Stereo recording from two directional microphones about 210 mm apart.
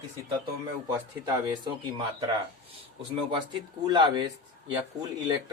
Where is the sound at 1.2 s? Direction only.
20° right (ahead or behind).